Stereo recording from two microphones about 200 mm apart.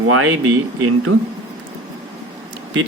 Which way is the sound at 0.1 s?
90° right.